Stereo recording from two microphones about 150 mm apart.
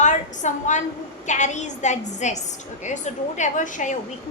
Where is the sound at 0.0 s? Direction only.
55° left (ahead or behind).